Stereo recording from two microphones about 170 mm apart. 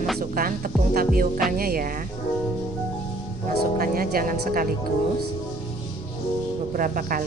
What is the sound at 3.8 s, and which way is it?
Speech, 60° right (ahead or behind).